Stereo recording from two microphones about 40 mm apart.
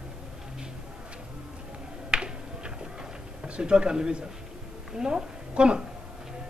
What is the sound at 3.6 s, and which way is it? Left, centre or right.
A woman's voice, right.